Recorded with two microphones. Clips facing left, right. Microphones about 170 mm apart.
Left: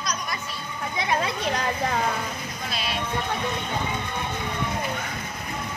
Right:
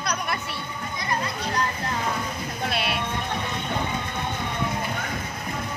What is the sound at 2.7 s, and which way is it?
Music, 65° right (ahead or behind).